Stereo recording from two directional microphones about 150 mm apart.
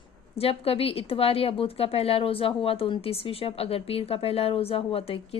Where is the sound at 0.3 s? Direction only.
40° left (ahead or behind).